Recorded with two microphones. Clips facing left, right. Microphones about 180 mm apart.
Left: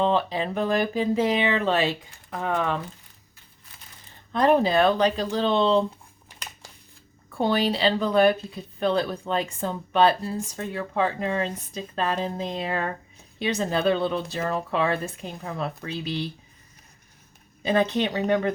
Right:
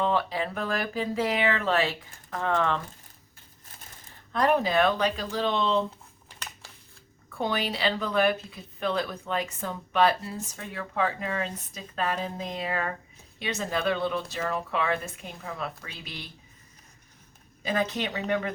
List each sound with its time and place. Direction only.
0.0 s speech: 25° left (ahead or behind)
4.3 s speech: 25° left (ahead or behind)
7.3 s speech: 30° left (ahead or behind)
17.6 s speech: 30° left (ahead or behind)